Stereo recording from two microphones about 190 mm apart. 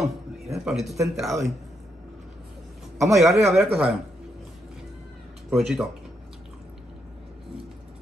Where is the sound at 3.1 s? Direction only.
Centre (ahead or behind).